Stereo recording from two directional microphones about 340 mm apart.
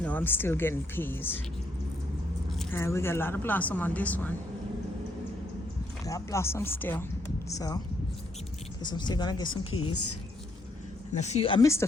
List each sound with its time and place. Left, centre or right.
0.0 s speech: centre
2.6 s speech: centre
6.1 s speech: centre
8.8 s speech: centre
9.7 s a woman's voice: left
11.2 s speech: centre